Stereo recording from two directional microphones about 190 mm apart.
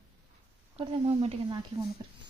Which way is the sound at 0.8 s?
30° right (ahead or behind).